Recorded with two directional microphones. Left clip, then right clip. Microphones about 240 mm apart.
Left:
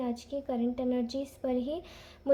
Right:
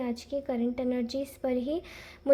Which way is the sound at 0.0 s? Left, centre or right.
Right.